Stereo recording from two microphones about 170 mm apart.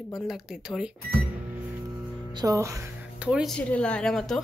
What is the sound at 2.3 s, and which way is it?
Speech, 20° right (ahead or behind).